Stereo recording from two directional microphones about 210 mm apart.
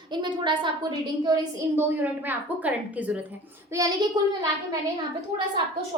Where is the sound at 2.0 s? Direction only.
10° right (ahead or behind).